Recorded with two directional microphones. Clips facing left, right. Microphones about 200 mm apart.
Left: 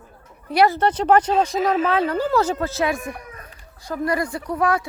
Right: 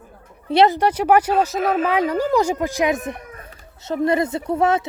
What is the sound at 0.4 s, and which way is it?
Speech, 25° right (ahead or behind).